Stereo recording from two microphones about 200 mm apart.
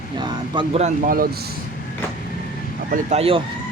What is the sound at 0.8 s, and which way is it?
Speech, 45° right (ahead or behind).